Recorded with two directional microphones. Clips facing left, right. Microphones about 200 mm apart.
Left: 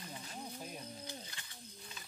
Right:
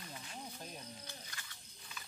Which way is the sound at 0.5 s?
10° left (ahead or behind).